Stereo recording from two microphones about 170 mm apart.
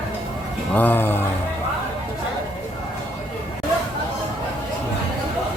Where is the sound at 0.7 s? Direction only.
10° left (ahead or behind).